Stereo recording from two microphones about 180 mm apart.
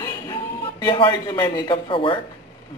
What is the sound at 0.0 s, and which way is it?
A man's voice, 20° left (ahead or behind).